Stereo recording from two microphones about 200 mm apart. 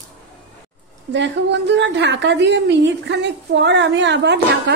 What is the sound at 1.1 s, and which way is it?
A woman's voice, 60° right (ahead or behind).